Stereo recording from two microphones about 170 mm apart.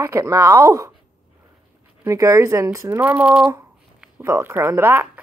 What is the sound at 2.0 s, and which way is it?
Speech, 20° right (ahead or behind).